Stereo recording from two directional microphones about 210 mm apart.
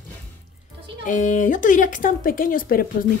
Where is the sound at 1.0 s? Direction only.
35° left (ahead or behind).